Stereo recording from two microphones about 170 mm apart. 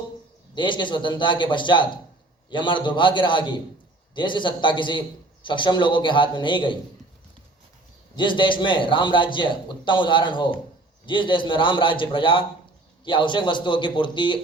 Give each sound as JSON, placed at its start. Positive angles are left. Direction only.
{"t": 0.5, "sound": "a man's voice", "side_deg": 30}
{"t": 8.1, "sound": "a man's voice", "side_deg": 30}